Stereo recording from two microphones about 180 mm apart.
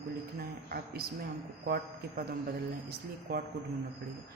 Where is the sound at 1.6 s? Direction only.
55° right (ahead or behind).